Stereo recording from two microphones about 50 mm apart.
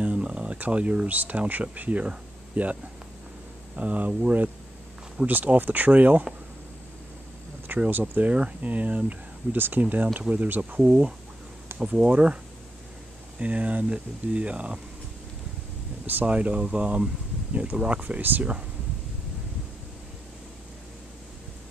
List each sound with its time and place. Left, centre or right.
0.0 s speech: right
7.9 s speech: right
10.8 s speech: centre
13.4 s speech: right
16.3 s speech: right